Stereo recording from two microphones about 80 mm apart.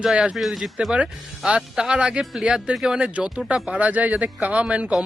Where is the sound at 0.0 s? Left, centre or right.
Centre.